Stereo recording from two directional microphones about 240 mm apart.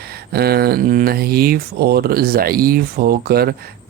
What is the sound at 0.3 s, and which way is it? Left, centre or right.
Speech, right.